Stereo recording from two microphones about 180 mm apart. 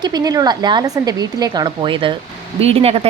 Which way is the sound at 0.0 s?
20° right (ahead or behind).